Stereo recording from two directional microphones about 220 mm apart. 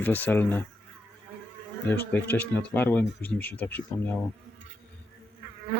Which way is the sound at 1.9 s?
10° left (ahead or behind).